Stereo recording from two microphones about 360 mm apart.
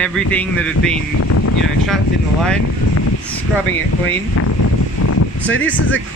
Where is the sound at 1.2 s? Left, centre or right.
Left.